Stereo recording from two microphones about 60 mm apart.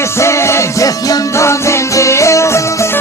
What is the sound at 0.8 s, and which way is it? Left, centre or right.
Music, left.